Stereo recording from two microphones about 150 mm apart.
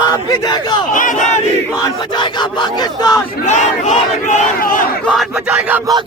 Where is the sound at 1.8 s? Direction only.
30° left (ahead or behind).